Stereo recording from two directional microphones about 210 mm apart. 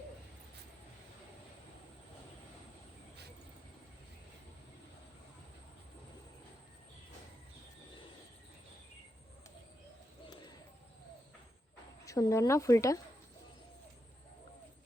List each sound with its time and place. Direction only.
12.0 s speech: 15° left (ahead or behind)